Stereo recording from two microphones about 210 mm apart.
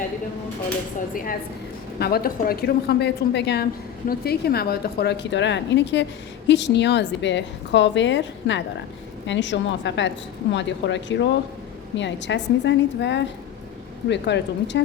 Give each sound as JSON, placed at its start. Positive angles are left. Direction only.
{"t": 1.1, "sound": "a woman's voice", "side_deg": 40}